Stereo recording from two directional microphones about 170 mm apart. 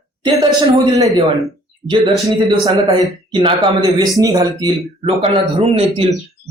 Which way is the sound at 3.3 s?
30° right (ahead or behind).